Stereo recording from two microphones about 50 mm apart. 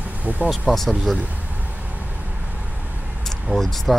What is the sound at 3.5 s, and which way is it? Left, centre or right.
Speech, centre.